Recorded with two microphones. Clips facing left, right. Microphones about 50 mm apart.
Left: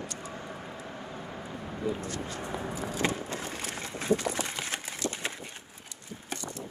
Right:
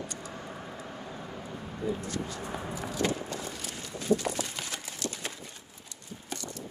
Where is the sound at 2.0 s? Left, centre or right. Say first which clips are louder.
Even; left.